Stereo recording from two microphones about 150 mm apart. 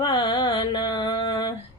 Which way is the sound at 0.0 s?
35° left (ahead or behind).